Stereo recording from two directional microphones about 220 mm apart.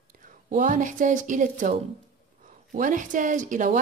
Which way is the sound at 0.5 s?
35° right (ahead or behind).